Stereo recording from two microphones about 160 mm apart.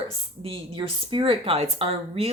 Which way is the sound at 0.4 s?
30° right (ahead or behind).